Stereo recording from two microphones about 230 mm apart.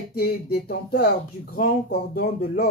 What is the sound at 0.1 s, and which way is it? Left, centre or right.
Speech, left.